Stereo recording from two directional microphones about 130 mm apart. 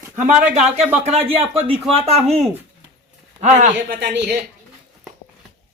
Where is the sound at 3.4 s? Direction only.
65° right (ahead or behind).